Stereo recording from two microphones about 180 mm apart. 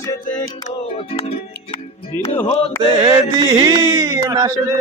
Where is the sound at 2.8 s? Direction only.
25° right (ahead or behind).